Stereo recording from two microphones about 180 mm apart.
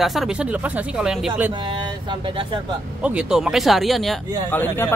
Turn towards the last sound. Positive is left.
turn(degrees=10)  # may be behind; listen again after turning